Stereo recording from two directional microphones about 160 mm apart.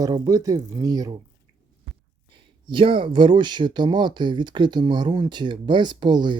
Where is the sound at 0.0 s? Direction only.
20° right (ahead or behind).